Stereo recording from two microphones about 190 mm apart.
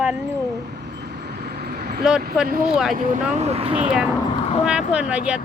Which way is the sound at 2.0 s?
5° right (ahead or behind).